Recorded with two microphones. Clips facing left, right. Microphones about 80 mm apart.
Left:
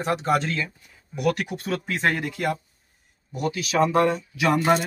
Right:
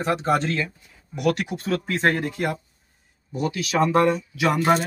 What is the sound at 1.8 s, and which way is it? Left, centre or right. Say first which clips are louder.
Speech: right 2 dB; right.